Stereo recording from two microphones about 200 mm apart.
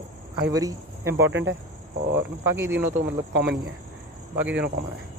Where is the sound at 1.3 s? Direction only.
70° right (ahead or behind).